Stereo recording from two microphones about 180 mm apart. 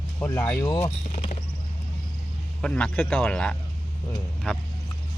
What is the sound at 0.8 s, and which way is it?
Speech, 35° left (ahead or behind).